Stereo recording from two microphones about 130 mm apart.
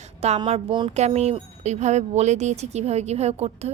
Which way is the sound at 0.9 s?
55° right (ahead or behind).